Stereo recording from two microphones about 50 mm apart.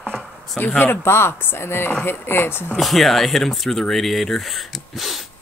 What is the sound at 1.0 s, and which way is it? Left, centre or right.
A woman's voice, left.